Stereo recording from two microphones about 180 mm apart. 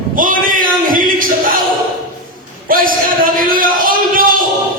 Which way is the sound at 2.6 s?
50° right (ahead or behind).